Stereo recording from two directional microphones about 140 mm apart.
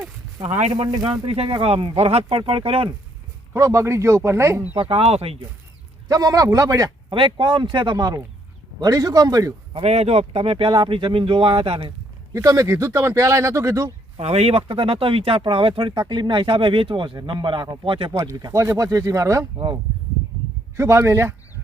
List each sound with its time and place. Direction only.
0.4 s a man's voice: 55° right (ahead or behind)
0.9 s speech: 30° right (ahead or behind)
1.4 s speech: 45° right (ahead or behind)
3.5 s speech: 20° right (ahead or behind)
4.8 s speech: 45° right (ahead or behind)
6.1 s speech: 25° right (ahead or behind)
7.1 s speech: 35° right (ahead or behind)
9.7 s speech: 50° right (ahead or behind)
12.3 s speech: 20° right (ahead or behind)
14.2 s speech: 50° right (ahead or behind)
18.2 s speech: 25° right (ahead or behind)
20.7 s speech: 20° right (ahead or behind)